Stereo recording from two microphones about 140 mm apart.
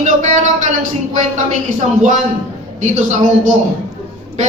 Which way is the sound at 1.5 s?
55° right (ahead or behind).